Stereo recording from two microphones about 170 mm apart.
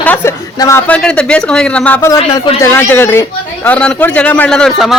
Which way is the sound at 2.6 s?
15° left (ahead or behind).